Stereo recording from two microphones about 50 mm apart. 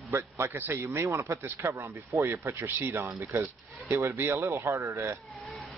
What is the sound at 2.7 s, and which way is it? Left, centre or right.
Speech, right.